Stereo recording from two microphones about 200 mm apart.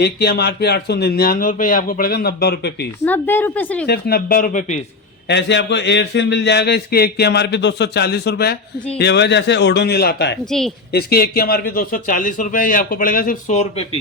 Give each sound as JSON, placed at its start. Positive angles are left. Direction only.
{"t": 0.0, "sound": "a man's voice", "side_deg": 55}
{"t": 3.0, "sound": "a woman's voice", "side_deg": 10}
{"t": 3.8, "sound": "a man's voice", "side_deg": 50}
{"t": 5.3, "sound": "speech", "side_deg": 60}
{"t": 10.4, "sound": "speech", "side_deg": 0}
{"t": 10.9, "sound": "a man's voice", "side_deg": 50}